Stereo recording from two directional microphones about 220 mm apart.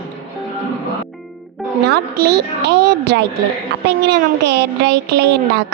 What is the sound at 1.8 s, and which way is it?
Speech, 50° right (ahead or behind).